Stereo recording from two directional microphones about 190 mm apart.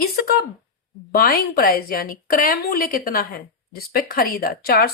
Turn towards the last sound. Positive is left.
turn(degrees=50)  # may be behind; listen again after turning